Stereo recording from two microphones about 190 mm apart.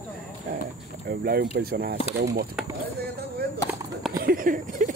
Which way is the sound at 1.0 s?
55° right (ahead or behind).